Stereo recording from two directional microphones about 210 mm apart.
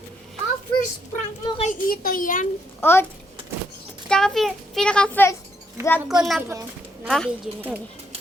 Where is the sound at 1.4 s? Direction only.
25° left (ahead or behind).